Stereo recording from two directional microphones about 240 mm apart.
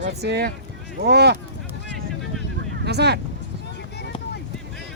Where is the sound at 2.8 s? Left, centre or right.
Right.